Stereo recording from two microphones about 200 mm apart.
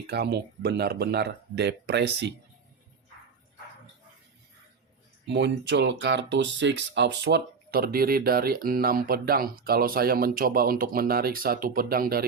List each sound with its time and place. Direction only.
0.1 s speech: 55° right (ahead or behind)
5.2 s speech: 60° right (ahead or behind)